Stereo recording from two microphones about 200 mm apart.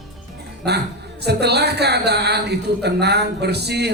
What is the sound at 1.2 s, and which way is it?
A woman's voice, 55° right (ahead or behind).